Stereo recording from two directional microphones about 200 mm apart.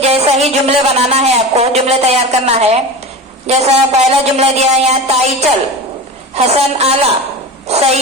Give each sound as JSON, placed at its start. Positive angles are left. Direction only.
{"t": 0.0, "sound": "a man's voice", "side_deg": -30}